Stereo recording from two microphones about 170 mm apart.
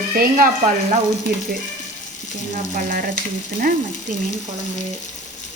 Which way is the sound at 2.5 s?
55° right (ahead or behind).